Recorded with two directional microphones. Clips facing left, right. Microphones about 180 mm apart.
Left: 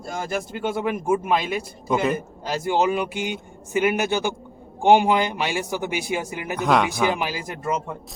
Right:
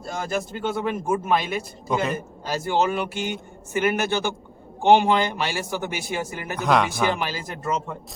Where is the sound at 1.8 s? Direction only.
Centre (ahead or behind).